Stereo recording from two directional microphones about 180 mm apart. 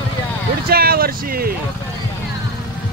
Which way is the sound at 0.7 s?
55° right (ahead or behind).